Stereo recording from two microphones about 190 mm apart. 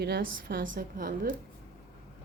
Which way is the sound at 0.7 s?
45° right (ahead or behind).